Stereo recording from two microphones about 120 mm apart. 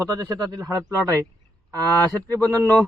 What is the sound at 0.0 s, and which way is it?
Speech, 30° right (ahead or behind).